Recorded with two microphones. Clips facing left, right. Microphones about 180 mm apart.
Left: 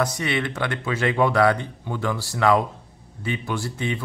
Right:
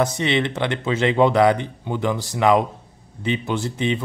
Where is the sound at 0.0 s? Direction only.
25° right (ahead or behind).